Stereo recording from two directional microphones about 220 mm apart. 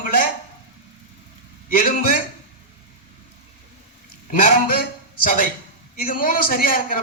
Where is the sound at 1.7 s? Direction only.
40° left (ahead or behind).